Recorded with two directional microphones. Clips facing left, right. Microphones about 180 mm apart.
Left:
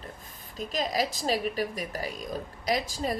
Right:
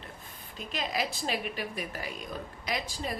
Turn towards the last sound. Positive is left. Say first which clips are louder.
# left 6 dB
turn(degrees=40)  # may be behind; listen again after turning